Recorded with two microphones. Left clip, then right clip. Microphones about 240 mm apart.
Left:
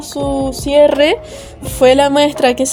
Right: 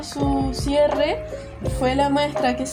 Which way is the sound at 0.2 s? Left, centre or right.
Left.